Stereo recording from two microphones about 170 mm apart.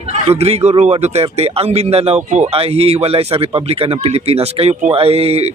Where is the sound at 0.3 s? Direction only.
35° right (ahead or behind).